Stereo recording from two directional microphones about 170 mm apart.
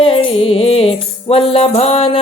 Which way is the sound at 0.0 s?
35° left (ahead or behind).